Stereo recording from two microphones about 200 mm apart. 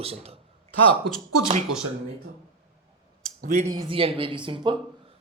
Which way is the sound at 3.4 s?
40° right (ahead or behind).